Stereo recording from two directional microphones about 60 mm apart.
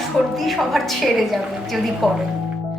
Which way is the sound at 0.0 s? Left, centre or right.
Centre.